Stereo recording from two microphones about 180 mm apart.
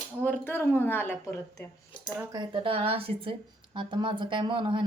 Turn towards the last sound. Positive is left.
turn(degrees=-30)  # may be behind; listen again after turning